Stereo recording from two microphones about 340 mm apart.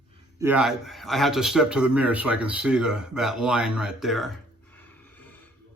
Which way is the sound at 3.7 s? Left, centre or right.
Centre.